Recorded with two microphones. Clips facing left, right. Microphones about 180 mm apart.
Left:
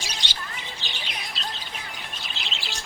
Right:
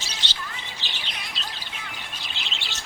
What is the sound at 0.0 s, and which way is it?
Squawk, 15° left (ahead or behind).